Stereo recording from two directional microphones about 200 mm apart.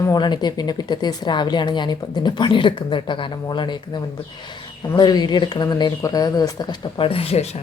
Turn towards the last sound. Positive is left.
turn(degrees=30)  # may be behind; listen again after turning